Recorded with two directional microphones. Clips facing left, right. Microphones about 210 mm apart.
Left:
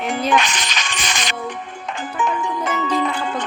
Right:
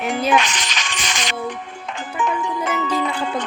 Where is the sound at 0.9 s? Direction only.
50° left (ahead or behind).